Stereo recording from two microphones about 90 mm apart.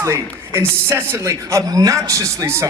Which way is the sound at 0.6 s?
25° right (ahead or behind).